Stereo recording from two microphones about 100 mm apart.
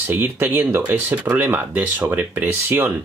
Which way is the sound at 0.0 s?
20° right (ahead or behind).